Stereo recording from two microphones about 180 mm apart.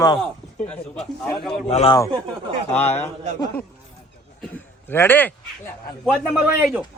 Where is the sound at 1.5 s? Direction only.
30° left (ahead or behind).